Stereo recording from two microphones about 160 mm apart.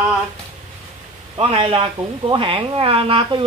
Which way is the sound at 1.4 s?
35° right (ahead or behind).